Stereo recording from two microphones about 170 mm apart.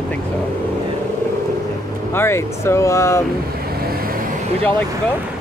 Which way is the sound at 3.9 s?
60° right (ahead or behind).